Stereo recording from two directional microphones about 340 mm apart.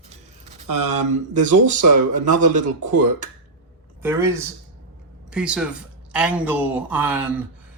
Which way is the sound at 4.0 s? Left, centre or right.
Centre.